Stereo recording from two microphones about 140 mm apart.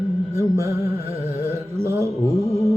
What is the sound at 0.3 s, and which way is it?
Music, 20° right (ahead or behind).